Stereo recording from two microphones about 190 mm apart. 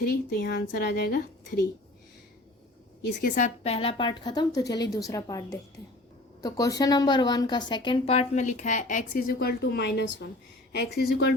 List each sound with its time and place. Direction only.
0.0 s a woman's voice: 55° left (ahead or behind)
3.2 s a woman's voice: 40° left (ahead or behind)